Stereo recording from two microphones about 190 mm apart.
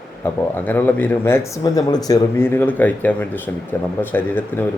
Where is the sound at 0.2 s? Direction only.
10° left (ahead or behind).